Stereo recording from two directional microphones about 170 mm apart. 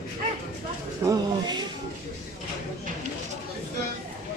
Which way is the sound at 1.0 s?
25° right (ahead or behind).